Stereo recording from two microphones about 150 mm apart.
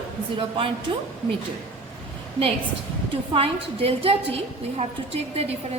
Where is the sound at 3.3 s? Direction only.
35° right (ahead or behind).